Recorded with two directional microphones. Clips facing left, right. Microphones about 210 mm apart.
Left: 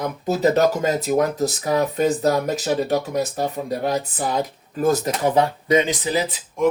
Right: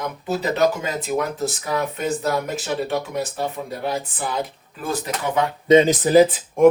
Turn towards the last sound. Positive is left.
turn(degrees=-50)  # may be behind; listen again after turning